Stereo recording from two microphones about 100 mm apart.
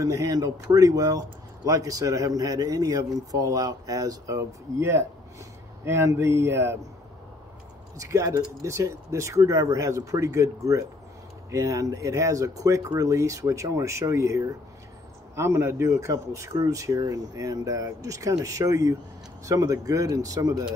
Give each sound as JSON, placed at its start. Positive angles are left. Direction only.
{"t": 0.0, "sound": "speech", "side_deg": -35}
{"t": 8.0, "sound": "speech", "side_deg": -30}